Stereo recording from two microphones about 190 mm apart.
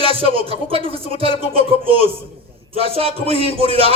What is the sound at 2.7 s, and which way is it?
A man's voice, 30° right (ahead or behind).